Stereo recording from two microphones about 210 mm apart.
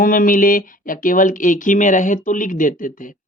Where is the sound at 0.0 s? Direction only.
40° left (ahead or behind).